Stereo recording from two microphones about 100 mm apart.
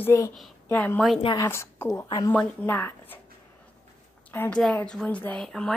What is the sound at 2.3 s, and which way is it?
Speech, 20° left (ahead or behind).